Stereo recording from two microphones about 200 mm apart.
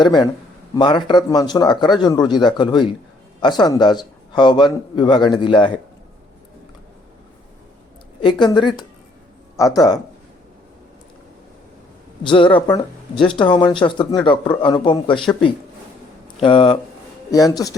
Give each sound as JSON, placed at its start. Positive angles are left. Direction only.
{"t": 0.0, "sound": "a man's voice", "side_deg": 20}
{"t": 8.2, "sound": "a man's voice", "side_deg": 25}
{"t": 12.2, "sound": "a man's voice", "side_deg": 25}
{"t": 16.4, "sound": "a man's voice", "side_deg": 25}